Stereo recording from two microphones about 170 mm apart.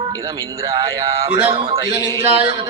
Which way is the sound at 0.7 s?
35° right (ahead or behind).